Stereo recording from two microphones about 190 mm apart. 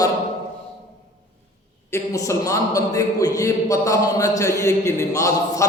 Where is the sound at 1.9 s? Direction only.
15° left (ahead or behind).